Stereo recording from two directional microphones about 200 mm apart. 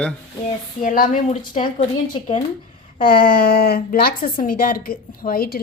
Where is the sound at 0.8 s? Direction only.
45° left (ahead or behind).